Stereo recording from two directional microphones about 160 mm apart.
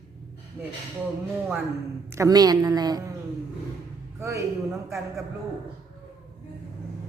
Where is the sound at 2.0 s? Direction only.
20° right (ahead or behind).